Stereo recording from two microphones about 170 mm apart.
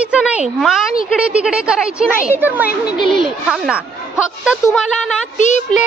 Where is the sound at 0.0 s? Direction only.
5° right (ahead or behind).